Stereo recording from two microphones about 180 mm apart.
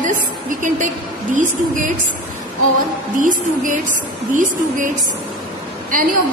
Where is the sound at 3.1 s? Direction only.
45° right (ahead or behind).